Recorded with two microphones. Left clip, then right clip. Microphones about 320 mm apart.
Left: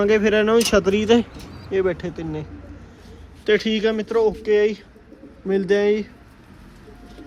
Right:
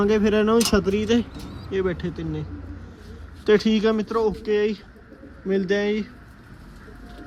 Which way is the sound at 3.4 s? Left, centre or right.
Centre.